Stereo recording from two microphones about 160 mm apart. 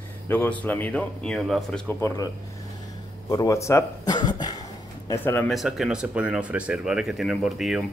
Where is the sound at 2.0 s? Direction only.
20° left (ahead or behind).